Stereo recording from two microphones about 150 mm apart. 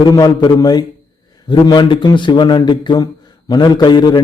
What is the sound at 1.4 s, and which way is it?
A man's voice, 30° left (ahead or behind).